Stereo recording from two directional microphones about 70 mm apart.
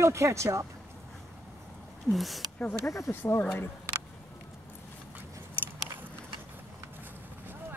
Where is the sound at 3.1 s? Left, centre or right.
Left.